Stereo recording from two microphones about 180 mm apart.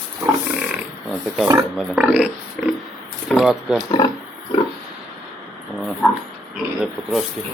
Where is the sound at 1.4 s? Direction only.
20° right (ahead or behind).